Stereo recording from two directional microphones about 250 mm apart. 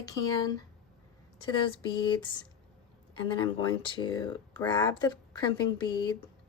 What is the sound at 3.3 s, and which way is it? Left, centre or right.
Speech, centre.